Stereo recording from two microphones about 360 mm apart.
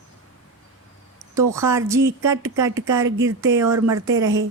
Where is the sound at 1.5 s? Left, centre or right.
Centre.